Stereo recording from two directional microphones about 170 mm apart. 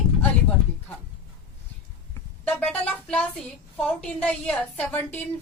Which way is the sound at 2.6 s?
5° left (ahead or behind).